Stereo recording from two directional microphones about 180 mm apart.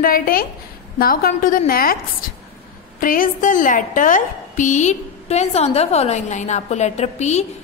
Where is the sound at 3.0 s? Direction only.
50° left (ahead or behind).